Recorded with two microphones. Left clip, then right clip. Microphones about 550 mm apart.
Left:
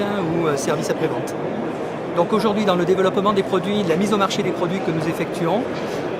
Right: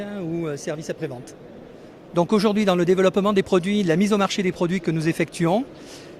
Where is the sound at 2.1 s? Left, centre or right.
Right.